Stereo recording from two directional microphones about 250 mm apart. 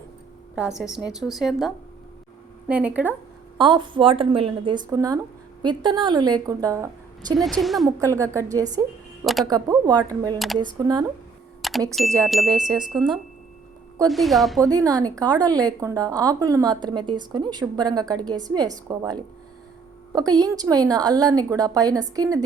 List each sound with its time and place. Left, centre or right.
0.5 s a woman's voice: centre
3.6 s a woman's voice: centre
7.3 s a woman's voice: centre
7.9 s a woman's voice: centre
9.2 s speech: centre
9.5 s a woman's voice: centre
10.3 s a woman's voice: centre
10.6 s a woman's voice: centre
11.6 s a sound: centre
12.2 s a woman's voice: centre
14.1 s a woman's voice: centre
14.6 s a woman's voice: centre